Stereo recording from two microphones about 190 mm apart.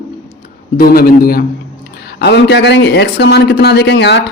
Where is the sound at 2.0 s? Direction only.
60° left (ahead or behind).